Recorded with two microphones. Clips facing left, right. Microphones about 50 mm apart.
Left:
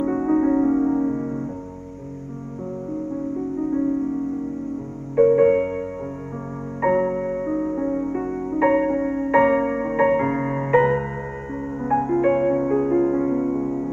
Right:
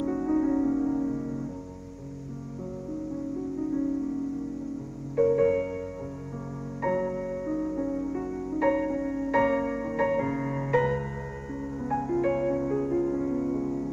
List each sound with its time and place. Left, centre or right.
0.0 s music: left
5.1 s music: left